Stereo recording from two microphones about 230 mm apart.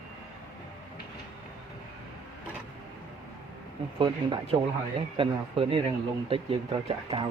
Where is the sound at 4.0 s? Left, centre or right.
Right.